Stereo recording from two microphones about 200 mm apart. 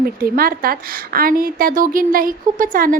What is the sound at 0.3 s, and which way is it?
A woman's voice, 45° right (ahead or behind).